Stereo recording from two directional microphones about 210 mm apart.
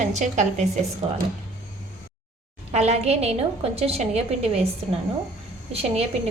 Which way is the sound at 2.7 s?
30° right (ahead or behind).